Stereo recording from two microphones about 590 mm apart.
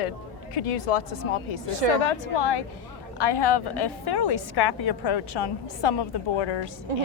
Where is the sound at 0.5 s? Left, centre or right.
Left.